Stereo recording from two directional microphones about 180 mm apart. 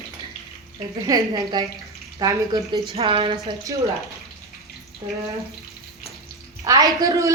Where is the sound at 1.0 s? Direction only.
20° right (ahead or behind).